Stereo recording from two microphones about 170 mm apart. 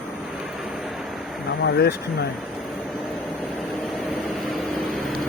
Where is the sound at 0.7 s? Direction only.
Centre (ahead or behind).